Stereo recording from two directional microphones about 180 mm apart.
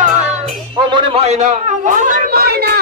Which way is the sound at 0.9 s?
35° right (ahead or behind).